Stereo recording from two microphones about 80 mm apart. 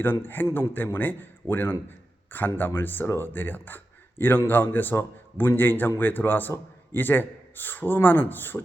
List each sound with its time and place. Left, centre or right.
0.0 s a man's voice: left